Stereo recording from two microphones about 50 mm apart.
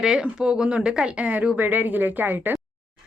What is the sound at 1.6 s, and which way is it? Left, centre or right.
Speech, right.